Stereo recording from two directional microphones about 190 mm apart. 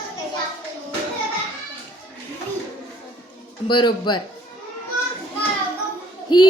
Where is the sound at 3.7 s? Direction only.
25° left (ahead or behind).